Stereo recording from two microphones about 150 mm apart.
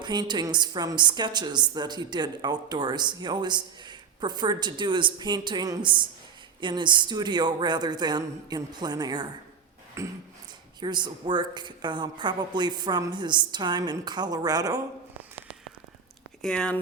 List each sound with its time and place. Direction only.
0.0 s a woman's voice: 30° right (ahead or behind)
16.4 s speech: 5° left (ahead or behind)